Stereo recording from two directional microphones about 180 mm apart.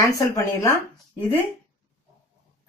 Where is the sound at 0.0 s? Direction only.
15° left (ahead or behind).